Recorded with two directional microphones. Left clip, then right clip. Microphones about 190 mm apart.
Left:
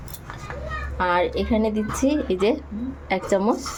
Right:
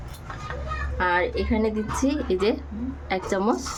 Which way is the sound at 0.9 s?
15° left (ahead or behind).